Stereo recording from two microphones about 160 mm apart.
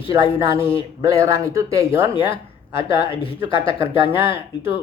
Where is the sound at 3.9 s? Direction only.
15° right (ahead or behind).